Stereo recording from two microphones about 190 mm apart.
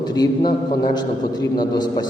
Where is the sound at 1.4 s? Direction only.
20° left (ahead or behind).